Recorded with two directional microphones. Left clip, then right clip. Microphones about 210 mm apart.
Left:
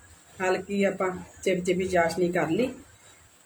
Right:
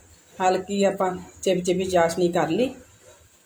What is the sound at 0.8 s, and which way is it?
Speech, 10° right (ahead or behind).